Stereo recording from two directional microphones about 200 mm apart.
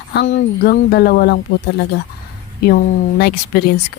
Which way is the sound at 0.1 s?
60° left (ahead or behind).